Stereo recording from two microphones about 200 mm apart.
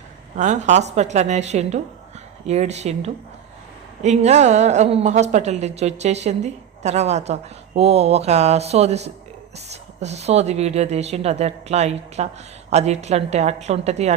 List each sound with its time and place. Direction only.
0.3 s a woman's voice: 35° right (ahead or behind)